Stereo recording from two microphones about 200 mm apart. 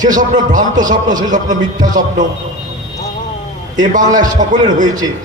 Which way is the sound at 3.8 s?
40° right (ahead or behind).